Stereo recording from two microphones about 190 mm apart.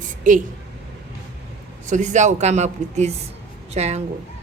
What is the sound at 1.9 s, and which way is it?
Speech, 40° right (ahead or behind).